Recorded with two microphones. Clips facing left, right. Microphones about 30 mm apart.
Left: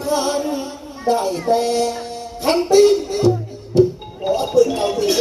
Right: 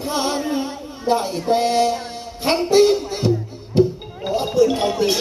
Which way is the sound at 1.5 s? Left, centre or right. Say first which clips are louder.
Right 1 dB; centre.